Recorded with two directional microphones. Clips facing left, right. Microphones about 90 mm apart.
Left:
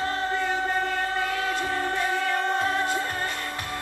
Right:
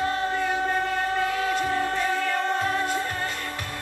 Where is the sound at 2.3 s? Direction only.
20° left (ahead or behind).